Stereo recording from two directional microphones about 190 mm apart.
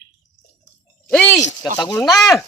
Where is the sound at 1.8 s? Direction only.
20° left (ahead or behind).